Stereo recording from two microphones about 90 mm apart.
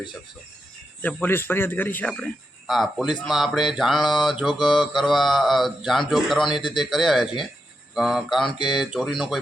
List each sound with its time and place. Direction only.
1.0 s a man's voice: 20° left (ahead or behind)
2.0 s mantra: 5° left (ahead or behind)